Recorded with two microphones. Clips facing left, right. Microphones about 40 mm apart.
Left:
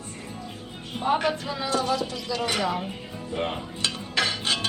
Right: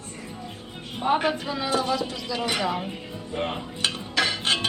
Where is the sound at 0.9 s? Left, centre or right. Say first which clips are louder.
Right 1 dB; centre.